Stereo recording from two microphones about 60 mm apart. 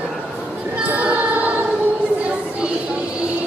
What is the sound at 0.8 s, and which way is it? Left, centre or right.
Music, right.